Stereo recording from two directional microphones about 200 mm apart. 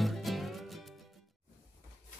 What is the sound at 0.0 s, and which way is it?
Music, centre (ahead or behind).